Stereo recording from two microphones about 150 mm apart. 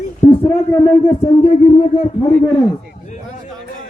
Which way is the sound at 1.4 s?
40° left (ahead or behind).